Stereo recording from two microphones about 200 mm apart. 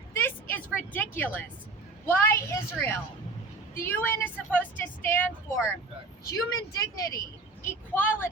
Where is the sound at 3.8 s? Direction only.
10° left (ahead or behind).